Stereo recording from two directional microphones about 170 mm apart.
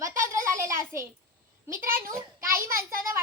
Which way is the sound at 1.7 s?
55° right (ahead or behind).